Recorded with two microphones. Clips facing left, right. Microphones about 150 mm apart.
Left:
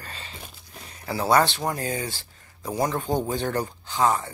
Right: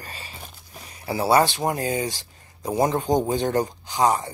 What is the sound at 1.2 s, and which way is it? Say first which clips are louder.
Speech: right 2 dB; 10° right (ahead or behind).